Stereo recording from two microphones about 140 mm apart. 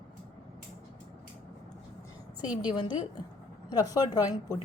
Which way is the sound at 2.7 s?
35° left (ahead or behind).